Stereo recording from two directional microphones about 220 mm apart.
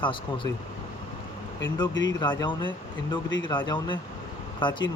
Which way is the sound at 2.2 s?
20° left (ahead or behind).